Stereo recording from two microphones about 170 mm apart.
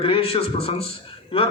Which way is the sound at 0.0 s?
35° left (ahead or behind).